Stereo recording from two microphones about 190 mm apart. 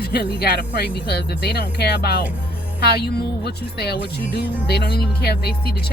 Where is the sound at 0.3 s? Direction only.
55° left (ahead or behind).